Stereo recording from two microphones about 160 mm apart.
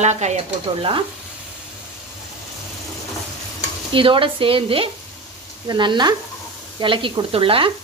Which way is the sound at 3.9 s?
35° right (ahead or behind).